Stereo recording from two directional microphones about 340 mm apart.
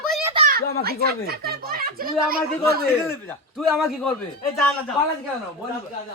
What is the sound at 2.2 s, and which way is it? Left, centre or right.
Speech, right.